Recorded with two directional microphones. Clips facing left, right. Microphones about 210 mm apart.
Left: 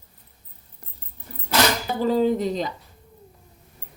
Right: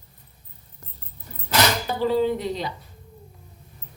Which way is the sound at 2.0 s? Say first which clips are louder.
Left 2 dB; 45° left (ahead or behind).